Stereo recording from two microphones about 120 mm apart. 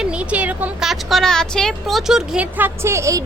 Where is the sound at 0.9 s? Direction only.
Centre (ahead or behind); by 3.2 s 25° right (ahead or behind).